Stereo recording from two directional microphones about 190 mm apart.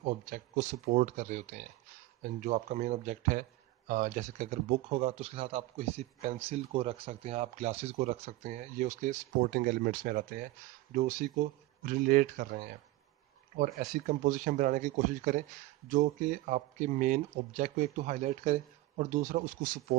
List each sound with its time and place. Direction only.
0.0 s a man's voice: 45° right (ahead or behind)
13.7 s a man's voice: 45° right (ahead or behind)